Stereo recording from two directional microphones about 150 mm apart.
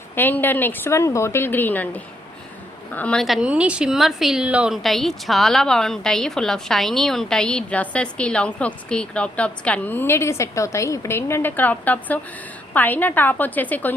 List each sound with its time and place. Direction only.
0.2 s a woman's voice: 15° left (ahead or behind)